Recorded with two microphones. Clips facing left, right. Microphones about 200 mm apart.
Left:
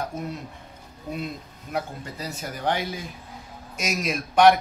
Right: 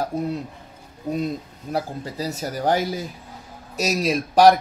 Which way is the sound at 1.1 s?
35° right (ahead or behind).